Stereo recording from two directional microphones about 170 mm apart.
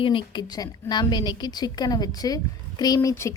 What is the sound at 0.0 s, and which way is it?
A woman's voice, 30° left (ahead or behind).